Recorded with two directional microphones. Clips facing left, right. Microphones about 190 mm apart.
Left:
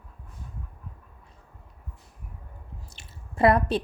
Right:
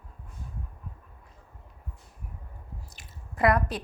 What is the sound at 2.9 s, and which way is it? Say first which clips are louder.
Drip: left 2 dB; 30° left (ahead or behind).